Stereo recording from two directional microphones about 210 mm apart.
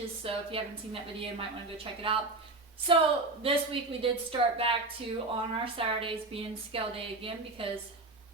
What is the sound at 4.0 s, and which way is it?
A woman's voice, 25° right (ahead or behind).